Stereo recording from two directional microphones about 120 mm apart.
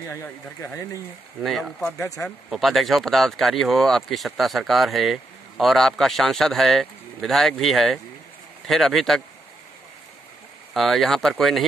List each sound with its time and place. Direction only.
0.1 s speech: 20° left (ahead or behind)
1.4 s speech: centre (ahead or behind)
2.0 s speech: 30° left (ahead or behind)
2.5 s speech: centre (ahead or behind)
10.7 s speech: centre (ahead or behind)